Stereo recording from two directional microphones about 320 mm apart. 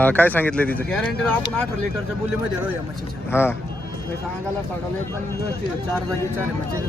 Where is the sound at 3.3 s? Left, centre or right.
Centre.